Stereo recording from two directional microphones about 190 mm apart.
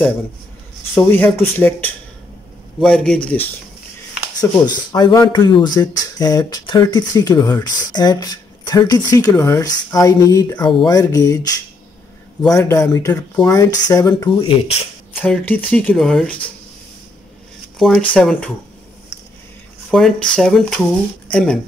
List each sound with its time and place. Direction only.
0.9 s speech: 10° left (ahead or behind)
2.8 s speech: 5° left (ahead or behind)
4.9 s speech: 20° left (ahead or behind)
12.4 s speech: 20° left (ahead or behind)
15.2 s speech: 5° left (ahead or behind)
17.7 s speech: centre (ahead or behind)
19.9 s speech: centre (ahead or behind)